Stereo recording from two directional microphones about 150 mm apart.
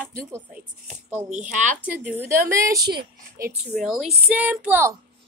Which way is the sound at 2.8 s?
30° right (ahead or behind).